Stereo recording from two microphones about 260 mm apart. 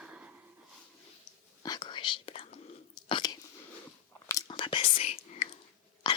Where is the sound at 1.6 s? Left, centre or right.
Centre.